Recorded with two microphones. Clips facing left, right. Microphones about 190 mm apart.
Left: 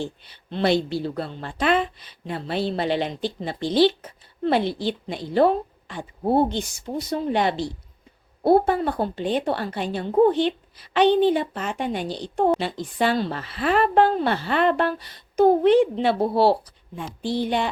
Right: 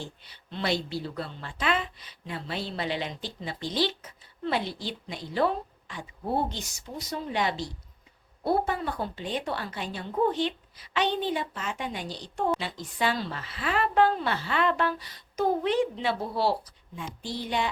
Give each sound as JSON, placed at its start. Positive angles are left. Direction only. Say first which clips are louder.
{"t": 0.2, "sound": "a woman's voice", "louder": "left 8 dB", "side_deg": 60}